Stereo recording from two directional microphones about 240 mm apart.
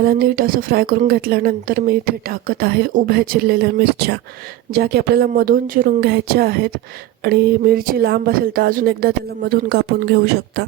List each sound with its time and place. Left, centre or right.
0.0 s a woman's voice: right